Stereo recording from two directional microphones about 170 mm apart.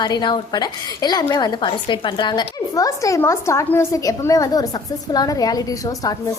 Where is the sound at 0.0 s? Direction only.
25° left (ahead or behind).